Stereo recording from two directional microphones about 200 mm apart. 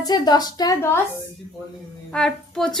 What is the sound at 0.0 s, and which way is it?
Speech, 20° left (ahead or behind).